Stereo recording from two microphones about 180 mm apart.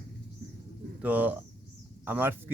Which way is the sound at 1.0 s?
10° right (ahead or behind).